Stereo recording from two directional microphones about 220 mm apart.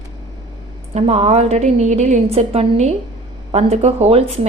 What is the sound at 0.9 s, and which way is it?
A woman's voice, 30° right (ahead or behind).